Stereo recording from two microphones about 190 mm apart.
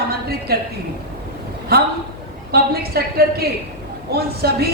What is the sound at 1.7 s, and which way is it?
A woman's voice, 55° right (ahead or behind).